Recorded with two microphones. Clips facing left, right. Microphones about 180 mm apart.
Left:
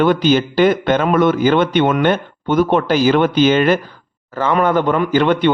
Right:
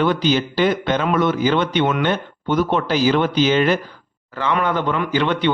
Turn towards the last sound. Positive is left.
turn(degrees=50)  # may be behind; listen again after turning